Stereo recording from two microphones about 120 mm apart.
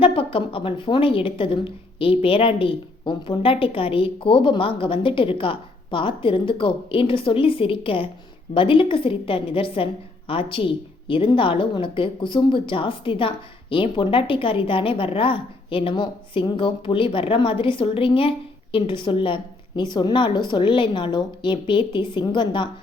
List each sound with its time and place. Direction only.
0.0 s a woman's voice: 50° left (ahead or behind)